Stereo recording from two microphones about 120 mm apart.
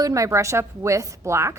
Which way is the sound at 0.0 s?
25° right (ahead or behind).